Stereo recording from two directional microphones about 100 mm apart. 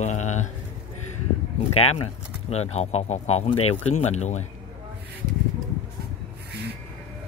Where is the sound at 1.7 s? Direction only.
90° left.